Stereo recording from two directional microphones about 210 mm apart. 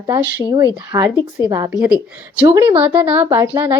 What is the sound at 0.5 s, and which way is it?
A woman's voice, 20° right (ahead or behind).